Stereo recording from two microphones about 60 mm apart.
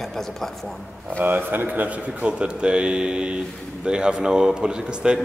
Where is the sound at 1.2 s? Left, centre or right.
Right.